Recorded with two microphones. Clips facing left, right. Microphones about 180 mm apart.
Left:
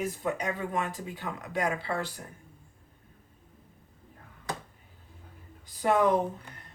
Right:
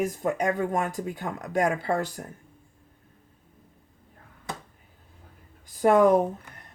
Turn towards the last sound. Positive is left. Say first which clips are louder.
# right 6 dB
turn(degrees=-50)  # may be behind; listen again after turning